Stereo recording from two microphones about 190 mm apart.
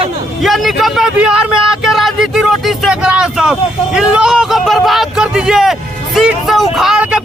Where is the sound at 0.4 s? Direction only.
Centre (ahead or behind).